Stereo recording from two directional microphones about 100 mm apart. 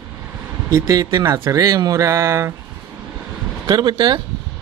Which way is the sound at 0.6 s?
35° right (ahead or behind).